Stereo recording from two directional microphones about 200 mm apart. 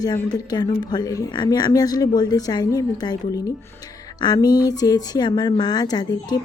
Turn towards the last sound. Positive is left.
turn(degrees=20)  # may be behind; listen again after turning